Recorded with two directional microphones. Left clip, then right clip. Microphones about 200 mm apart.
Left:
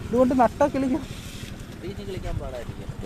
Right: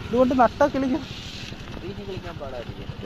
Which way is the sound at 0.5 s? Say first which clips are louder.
Right 1 dB; centre (ahead or behind).